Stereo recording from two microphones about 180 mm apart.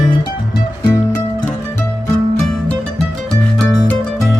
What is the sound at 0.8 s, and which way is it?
Music, 20° left (ahead or behind).